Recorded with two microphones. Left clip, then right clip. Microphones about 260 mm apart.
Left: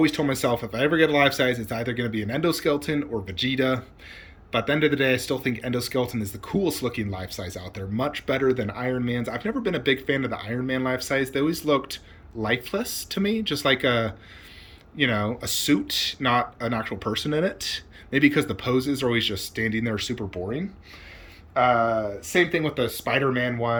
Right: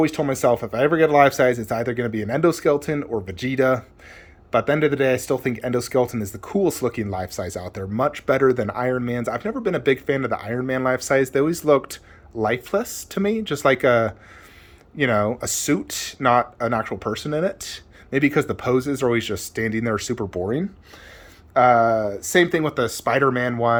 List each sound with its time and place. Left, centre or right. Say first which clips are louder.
0.0 s speech: right 3 dB; centre
21.5 s speech: right 5 dB; right